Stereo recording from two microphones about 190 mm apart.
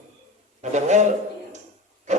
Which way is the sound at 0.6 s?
40° right (ahead or behind).